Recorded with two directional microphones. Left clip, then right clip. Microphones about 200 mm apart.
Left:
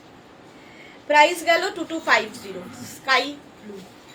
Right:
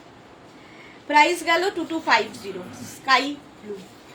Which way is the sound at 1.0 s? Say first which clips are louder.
Left 1 dB; 20° left (ahead or behind).